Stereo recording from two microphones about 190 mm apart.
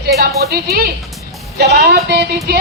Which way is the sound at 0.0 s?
55° right (ahead or behind).